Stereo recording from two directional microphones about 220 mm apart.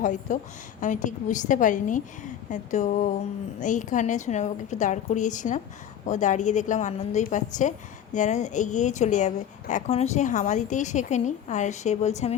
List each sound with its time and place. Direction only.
0.0 s a woman's voice: 35° left (ahead or behind)